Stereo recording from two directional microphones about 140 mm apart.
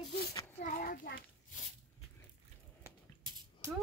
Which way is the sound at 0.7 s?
90° left.